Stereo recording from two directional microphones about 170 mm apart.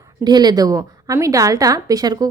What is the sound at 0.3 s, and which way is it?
A woman's voice, 25° right (ahead or behind).